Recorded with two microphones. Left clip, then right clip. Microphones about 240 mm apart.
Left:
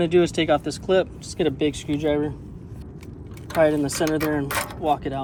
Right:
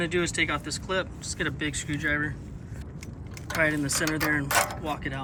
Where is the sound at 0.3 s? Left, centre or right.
Centre.